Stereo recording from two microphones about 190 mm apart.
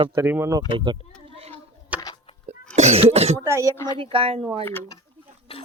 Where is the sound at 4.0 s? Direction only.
30° right (ahead or behind).